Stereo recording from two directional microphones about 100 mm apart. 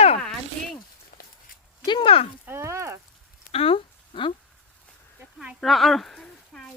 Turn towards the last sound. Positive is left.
turn(degrees=5)  # may be behind; listen again after turning